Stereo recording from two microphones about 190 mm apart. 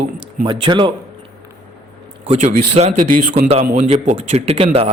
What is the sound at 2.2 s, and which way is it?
A man's voice, 30° right (ahead or behind).